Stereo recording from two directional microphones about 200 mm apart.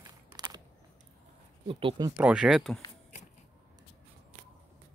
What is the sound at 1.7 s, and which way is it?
Speech, 25° right (ahead or behind).